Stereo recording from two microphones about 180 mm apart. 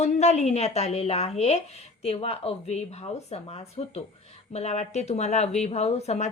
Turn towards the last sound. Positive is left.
turn(degrees=35)  # may be behind; listen again after turning